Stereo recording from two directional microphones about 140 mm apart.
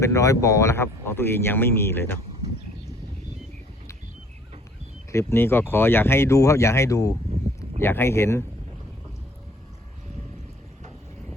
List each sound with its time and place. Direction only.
0.0 s speech: 20° left (ahead or behind)
5.1 s speech: 15° left (ahead or behind)